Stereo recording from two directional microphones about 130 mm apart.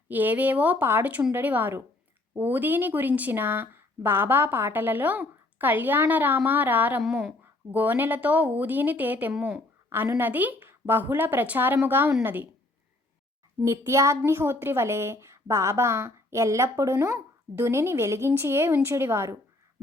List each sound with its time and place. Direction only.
0.1 s speech: 15° right (ahead or behind)
13.7 s a woman's voice: 20° right (ahead or behind)